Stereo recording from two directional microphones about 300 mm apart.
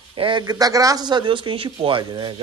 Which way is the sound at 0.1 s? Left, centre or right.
Centre.